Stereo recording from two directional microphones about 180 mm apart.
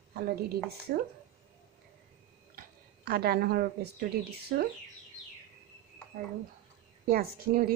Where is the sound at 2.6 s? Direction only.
55° right (ahead or behind).